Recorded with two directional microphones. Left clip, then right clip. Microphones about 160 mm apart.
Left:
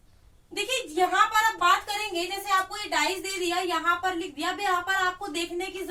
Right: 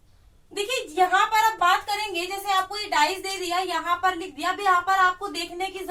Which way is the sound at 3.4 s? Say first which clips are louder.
Even; 10° left (ahead or behind).